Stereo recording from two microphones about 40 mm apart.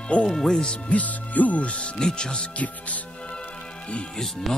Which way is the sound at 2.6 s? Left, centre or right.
Left.